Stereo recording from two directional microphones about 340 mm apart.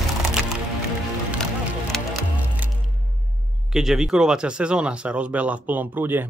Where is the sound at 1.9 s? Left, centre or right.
Centre.